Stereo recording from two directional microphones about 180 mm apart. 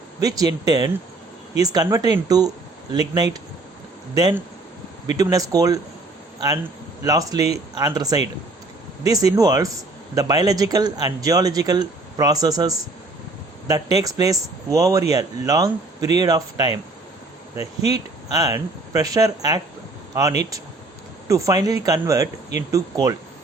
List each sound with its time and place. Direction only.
0.2 s speech: 20° right (ahead or behind)
7.0 s speech: 20° right (ahead or behind)
17.9 s speech: 20° right (ahead or behind)
21.2 s speech: 20° right (ahead or behind)